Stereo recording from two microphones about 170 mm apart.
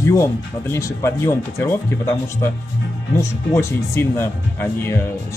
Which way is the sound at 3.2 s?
15° left (ahead or behind).